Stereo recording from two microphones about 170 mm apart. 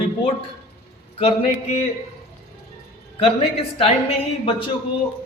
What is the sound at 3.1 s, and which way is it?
A woman's voice, 35° left (ahead or behind).